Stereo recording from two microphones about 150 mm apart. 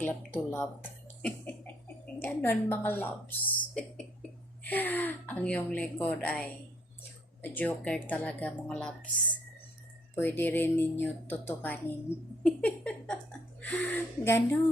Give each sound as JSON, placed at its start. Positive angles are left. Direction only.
{"t": 0.0, "sound": "a woman's voice", "side_deg": 10}
{"t": 1.2, "sound": "cough", "side_deg": 10}
{"t": 2.1, "sound": "a woman's voice", "side_deg": 15}
{"t": 7.4, "sound": "a woman's voice", "side_deg": 10}
{"t": 10.2, "sound": "a woman's voice", "side_deg": 15}
{"t": 12.4, "sound": "a sound", "side_deg": 5}
{"t": 13.6, "sound": "a woman's voice", "side_deg": 10}